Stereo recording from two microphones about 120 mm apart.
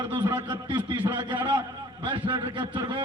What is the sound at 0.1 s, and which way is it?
A man's voice, 20° right (ahead or behind).